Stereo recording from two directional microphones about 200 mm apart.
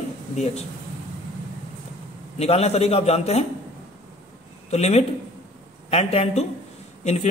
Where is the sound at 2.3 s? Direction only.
30° left (ahead or behind).